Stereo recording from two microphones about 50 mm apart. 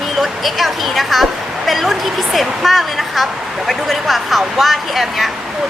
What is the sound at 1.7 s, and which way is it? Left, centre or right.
A woman's voice, centre.